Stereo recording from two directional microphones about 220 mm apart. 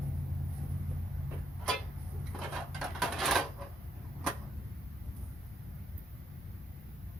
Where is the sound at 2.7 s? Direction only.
Centre (ahead or behind).